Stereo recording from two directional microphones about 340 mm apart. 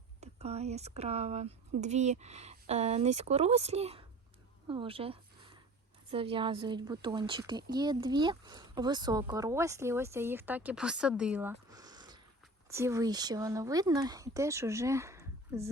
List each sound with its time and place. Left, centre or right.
0.2 s speech: centre